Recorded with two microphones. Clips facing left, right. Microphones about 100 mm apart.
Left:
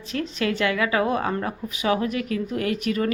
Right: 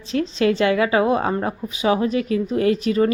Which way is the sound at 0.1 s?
25° right (ahead or behind).